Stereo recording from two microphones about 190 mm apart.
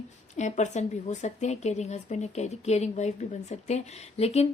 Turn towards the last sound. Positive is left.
turn(degrees=35)  # may be behind; listen again after turning